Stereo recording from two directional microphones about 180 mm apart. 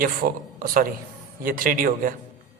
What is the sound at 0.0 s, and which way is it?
A man's voice, 50° right (ahead or behind).